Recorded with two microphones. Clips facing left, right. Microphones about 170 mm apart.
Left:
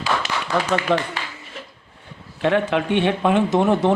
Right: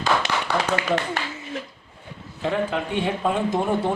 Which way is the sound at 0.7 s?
75° left (ahead or behind).